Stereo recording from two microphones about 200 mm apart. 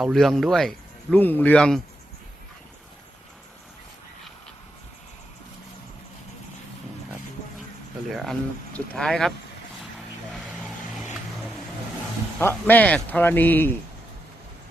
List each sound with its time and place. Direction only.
0.0 s speech: centre (ahead or behind)
8.1 s speech: centre (ahead or behind)
10.3 s vehicle: centre (ahead or behind)
12.4 s speech: 10° left (ahead or behind)